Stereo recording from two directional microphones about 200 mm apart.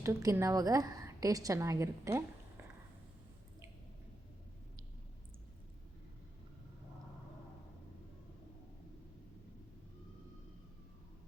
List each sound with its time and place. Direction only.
0.0 s a woman's voice: 15° right (ahead or behind)